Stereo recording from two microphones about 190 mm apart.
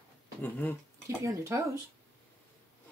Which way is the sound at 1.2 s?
15° right (ahead or behind).